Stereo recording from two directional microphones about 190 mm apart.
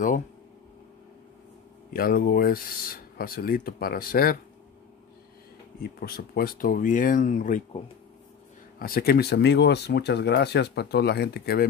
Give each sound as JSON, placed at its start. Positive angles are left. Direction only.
{"t": 2.0, "sound": "speech", "side_deg": 50}
{"t": 5.8, "sound": "speech", "side_deg": 55}